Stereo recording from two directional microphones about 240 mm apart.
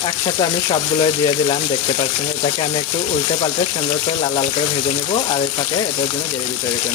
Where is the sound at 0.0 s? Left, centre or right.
Centre.